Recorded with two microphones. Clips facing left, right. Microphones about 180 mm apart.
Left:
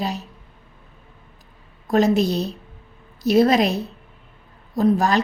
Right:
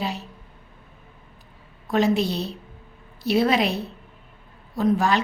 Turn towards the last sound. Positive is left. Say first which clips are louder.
# left 3 dB
turn(degrees=40)  # may be behind; listen again after turning